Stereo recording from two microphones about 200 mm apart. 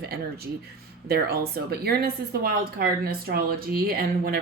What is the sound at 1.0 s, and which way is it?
Speech, 50° right (ahead or behind).